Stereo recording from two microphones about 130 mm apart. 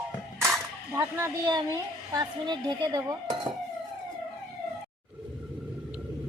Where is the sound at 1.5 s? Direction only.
30° right (ahead or behind).